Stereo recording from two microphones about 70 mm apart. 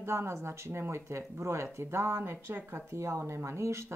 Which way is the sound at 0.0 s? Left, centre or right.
Right.